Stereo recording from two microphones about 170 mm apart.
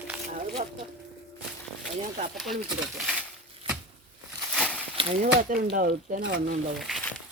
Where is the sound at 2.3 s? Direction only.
Centre (ahead or behind).